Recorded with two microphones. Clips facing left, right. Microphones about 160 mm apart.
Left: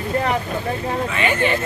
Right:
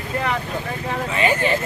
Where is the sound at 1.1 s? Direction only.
35° right (ahead or behind).